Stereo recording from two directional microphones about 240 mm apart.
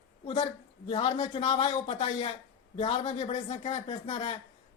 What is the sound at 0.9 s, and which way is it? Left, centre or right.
Speech, left.